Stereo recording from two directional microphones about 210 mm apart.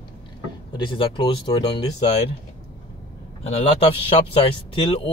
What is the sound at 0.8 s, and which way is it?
Speech, 25° left (ahead or behind).